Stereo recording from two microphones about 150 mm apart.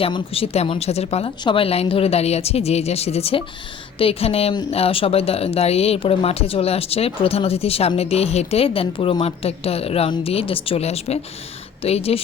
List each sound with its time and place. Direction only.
0.0 s a woman's voice: 40° left (ahead or behind)